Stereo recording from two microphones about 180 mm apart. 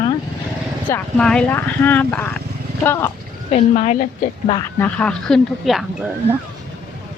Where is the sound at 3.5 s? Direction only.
40° left (ahead or behind).